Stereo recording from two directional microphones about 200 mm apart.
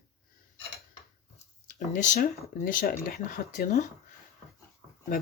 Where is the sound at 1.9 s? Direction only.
45° left (ahead or behind).